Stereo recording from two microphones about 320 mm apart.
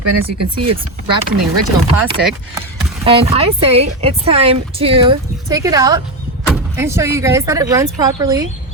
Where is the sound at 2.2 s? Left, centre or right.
Right.